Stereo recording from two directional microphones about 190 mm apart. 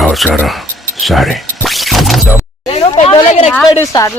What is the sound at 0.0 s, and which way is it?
Speech, centre (ahead or behind).